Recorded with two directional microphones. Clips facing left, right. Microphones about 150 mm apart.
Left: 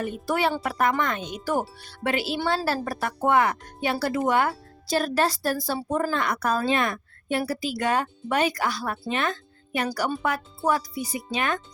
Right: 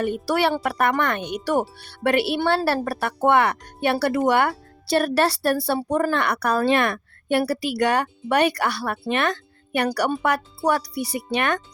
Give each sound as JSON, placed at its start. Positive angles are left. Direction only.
{"t": 0.0, "sound": "speech", "side_deg": -75}